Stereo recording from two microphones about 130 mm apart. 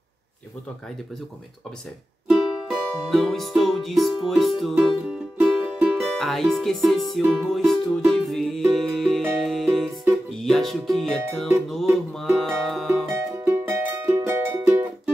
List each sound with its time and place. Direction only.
2.7 s music: centre (ahead or behind)
6.1 s speech: centre (ahead or behind)
7.4 s music: centre (ahead or behind)
10.3 s speech: centre (ahead or behind)
11.7 s music: centre (ahead or behind)
13.1 s music: 20° right (ahead or behind)